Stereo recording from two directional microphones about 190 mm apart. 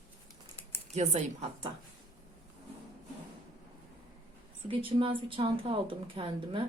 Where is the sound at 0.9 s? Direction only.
35° right (ahead or behind).